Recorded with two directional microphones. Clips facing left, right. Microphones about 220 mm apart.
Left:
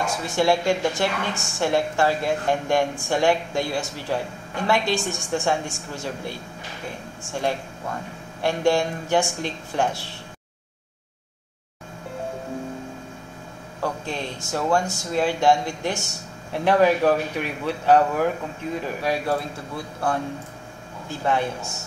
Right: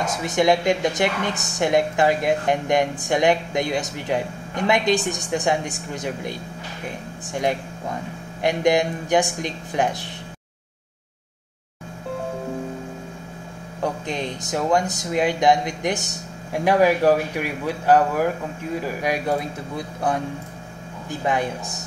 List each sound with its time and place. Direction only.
0.0 s a woman's voice: 20° right (ahead or behind)
13.7 s a woman's voice: 20° right (ahead or behind)
21.1 s a woman's voice: 15° right (ahead or behind)